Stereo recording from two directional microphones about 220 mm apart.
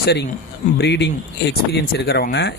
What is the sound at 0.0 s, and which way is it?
Speech, 50° left (ahead or behind).